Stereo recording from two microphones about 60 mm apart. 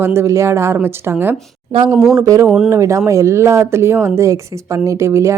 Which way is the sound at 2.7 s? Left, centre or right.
Right.